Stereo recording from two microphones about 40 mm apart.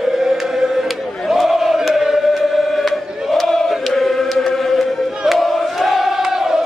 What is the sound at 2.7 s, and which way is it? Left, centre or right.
Chant, centre.